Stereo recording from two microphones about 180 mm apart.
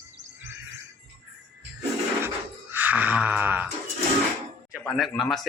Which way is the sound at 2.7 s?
10° right (ahead or behind).